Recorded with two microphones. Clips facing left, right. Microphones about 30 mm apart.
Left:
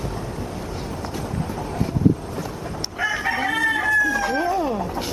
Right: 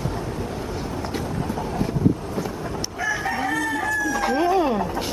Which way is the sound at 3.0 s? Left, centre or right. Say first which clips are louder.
Left 2 dB; left.